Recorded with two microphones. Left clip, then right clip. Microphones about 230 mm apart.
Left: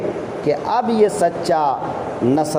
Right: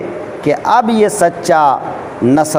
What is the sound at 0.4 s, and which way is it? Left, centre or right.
Speech, right.